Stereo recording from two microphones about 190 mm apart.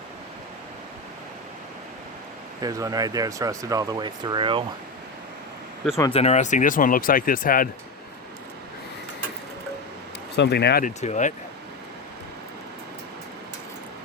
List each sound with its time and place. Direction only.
2.6 s speech: 20° right (ahead or behind)
6.1 s speech: 35° left (ahead or behind)
10.3 s speech: 60° left (ahead or behind); by 11.3 s 40° left (ahead or behind)